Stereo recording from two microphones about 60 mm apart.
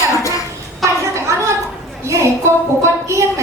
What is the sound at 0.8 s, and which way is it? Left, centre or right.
Speech, right.